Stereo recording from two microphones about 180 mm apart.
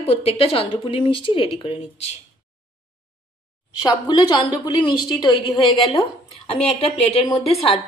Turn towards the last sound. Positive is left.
turn(degrees=0)  # may be behind; listen again after turning